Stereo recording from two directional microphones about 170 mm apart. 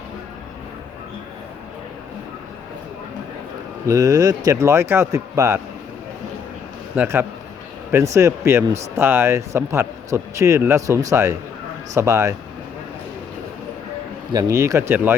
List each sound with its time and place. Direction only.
3.8 s speech: 20° right (ahead or behind)
6.9 s speech: 10° right (ahead or behind)
14.3 s speech: 20° right (ahead or behind)